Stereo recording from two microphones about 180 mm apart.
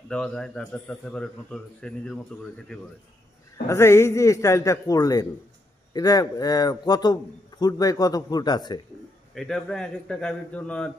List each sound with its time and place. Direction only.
0.1 s a man's voice: 5° left (ahead or behind)
3.6 s a man's voice: 15° left (ahead or behind)
9.3 s a man's voice: centre (ahead or behind)